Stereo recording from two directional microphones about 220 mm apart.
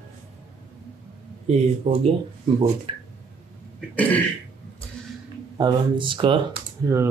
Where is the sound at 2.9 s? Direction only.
25° right (ahead or behind).